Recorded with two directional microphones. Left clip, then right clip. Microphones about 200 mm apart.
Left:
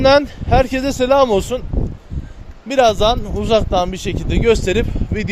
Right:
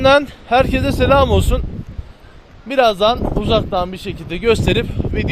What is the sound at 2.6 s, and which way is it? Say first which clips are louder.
Speech: even; 15° left (ahead or behind).